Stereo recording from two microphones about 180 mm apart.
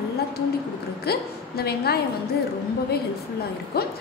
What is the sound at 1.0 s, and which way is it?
A woman's voice, 60° left (ahead or behind).